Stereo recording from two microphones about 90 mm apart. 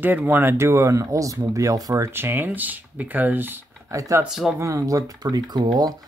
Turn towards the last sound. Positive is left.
turn(degrees=-45)  # may be behind; listen again after turning